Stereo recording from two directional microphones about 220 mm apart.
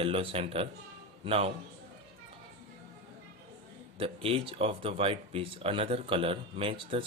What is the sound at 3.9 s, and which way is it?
Speech, 25° right (ahead or behind).